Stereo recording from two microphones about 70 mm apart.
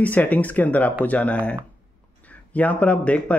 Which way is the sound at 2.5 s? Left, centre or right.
Left.